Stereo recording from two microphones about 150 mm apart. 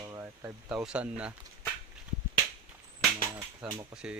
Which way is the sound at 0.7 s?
5° right (ahead or behind).